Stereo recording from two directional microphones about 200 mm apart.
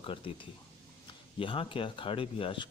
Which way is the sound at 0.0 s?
25° left (ahead or behind).